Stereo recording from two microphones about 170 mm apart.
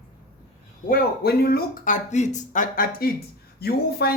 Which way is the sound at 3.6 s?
65° left (ahead or behind).